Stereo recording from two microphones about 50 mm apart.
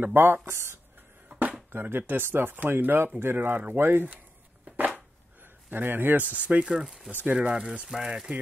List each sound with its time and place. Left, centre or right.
0.0 s speech: right
1.3 s music: right
1.7 s speech: right
4.7 s a sound: right
6.2 s speech: right
6.8 s speech: centre
7.2 s speech: right